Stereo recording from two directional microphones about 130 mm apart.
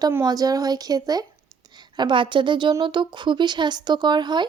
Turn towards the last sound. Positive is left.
turn(degrees=-35)  # may be behind; listen again after turning